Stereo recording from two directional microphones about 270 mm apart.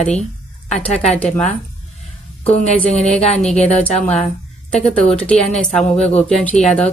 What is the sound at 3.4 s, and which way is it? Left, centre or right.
Speech, centre.